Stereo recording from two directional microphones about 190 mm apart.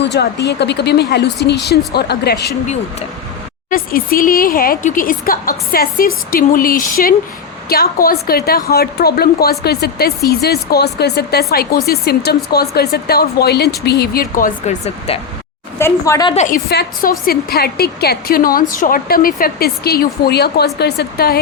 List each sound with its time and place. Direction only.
0.0 s speech: 65° left (ahead or behind)
3.7 s a woman's voice: 50° left (ahead or behind); by 15.2 s 35° left (ahead or behind)
15.8 s a woman's voice: 15° left (ahead or behind)
16.3 s a woman's voice: 35° left (ahead or behind)
16.6 s a woman's voice: 55° left (ahead or behind)